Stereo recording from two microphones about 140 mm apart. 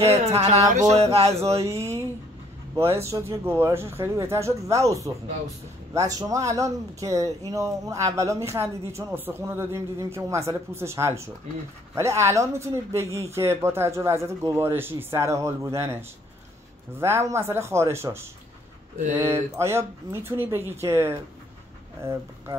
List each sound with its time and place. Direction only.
0.0 s speech: 50° right (ahead or behind)
1.7 s speech: 20° right (ahead or behind)
17.0 s speech: 20° right (ahead or behind)